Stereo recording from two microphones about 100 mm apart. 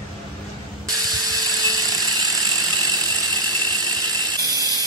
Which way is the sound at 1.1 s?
40° right (ahead or behind).